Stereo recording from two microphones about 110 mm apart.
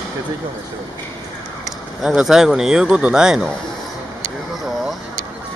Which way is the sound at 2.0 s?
5° right (ahead or behind).